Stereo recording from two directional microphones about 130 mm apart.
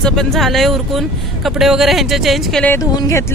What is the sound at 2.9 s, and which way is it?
Music, 25° left (ahead or behind).